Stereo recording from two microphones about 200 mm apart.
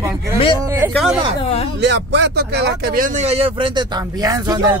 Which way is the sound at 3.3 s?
30° right (ahead or behind).